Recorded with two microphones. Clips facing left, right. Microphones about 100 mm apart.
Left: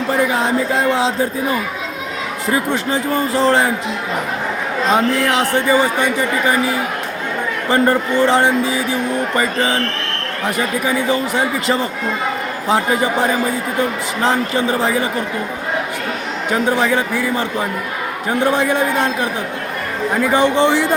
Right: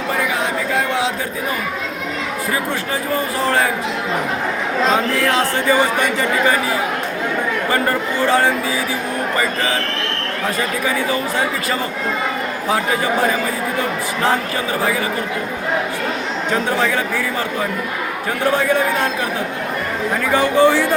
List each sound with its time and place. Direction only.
0.3 s a sound: 30° left (ahead or behind)
2.9 s speech: 30° left (ahead or behind)
5.3 s speech: 20° left (ahead or behind)
7.7 s speech: 25° left (ahead or behind)
14.3 s speech: 25° left (ahead or behind)
16.5 s speech: 15° left (ahead or behind)
20.3 s speech: 20° left (ahead or behind)